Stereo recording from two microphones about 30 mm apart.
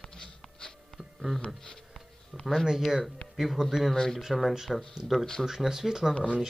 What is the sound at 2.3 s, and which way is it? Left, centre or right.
Speech, right.